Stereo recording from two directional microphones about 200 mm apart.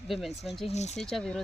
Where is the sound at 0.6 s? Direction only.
35° left (ahead or behind).